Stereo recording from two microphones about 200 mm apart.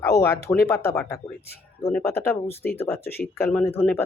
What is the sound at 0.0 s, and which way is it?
Speech, 15° left (ahead or behind).